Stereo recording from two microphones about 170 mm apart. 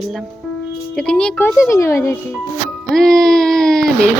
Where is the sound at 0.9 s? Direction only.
5° left (ahead or behind).